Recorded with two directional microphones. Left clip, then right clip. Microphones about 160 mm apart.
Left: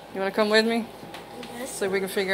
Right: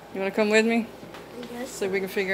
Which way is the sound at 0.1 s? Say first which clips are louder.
Even; 30° right (ahead or behind).